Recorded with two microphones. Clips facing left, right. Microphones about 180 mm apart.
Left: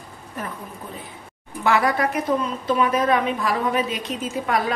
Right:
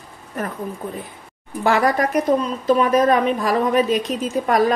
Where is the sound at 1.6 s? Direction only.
40° right (ahead or behind).